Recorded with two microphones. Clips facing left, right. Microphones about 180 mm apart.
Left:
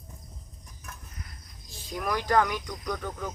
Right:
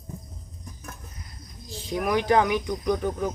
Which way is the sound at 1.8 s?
20° right (ahead or behind).